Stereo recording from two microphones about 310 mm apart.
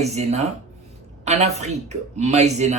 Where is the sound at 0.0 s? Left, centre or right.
Right.